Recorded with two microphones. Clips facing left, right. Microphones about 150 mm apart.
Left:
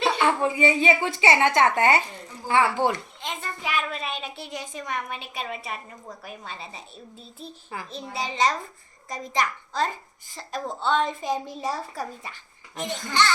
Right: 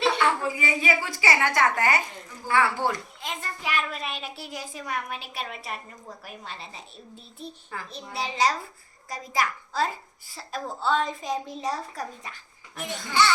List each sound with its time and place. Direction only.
0.2 s a woman's voice: 25° left (ahead or behind)
3.2 s a woman's voice: centre (ahead or behind)